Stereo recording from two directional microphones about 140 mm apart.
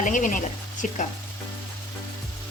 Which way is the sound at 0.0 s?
70° left (ahead or behind).